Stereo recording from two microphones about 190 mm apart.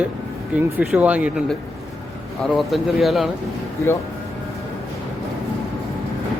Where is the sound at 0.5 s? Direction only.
5° right (ahead or behind).